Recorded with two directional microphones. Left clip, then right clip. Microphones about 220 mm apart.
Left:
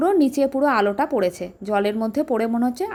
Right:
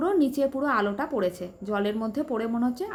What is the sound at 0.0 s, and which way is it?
Speech, 30° left (ahead or behind).